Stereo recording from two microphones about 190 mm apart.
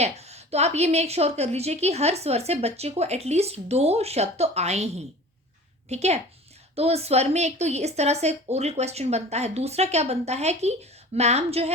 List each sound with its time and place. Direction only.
0.0 s a woman's voice: 35° right (ahead or behind)